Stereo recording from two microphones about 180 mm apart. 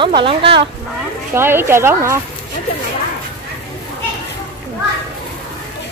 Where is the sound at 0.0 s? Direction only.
30° right (ahead or behind).